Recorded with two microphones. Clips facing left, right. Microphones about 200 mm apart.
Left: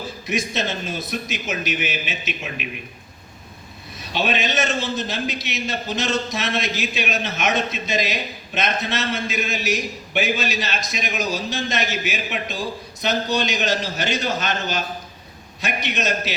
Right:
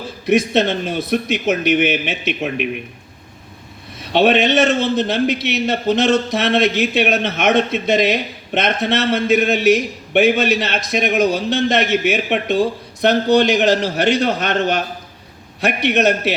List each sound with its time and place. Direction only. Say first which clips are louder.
0.3 s a man's voice: right 10 dB; 60° right (ahead or behind)
4.1 s a man's voice: right 9 dB; 65° right (ahead or behind)